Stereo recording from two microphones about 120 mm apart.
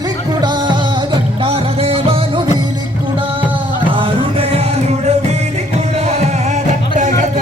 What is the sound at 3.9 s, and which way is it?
Music, 45° right (ahead or behind).